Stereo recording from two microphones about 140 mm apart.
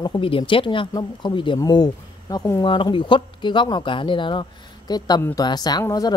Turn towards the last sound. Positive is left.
turn(degrees=30)  # may be behind; listen again after turning